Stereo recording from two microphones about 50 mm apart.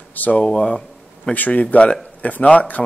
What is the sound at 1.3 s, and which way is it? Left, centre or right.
Speech, left.